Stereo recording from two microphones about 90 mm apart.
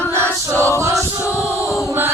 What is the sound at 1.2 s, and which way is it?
Chant, 30° left (ahead or behind).